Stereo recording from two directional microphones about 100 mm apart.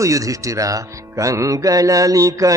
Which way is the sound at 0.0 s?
35° right (ahead or behind).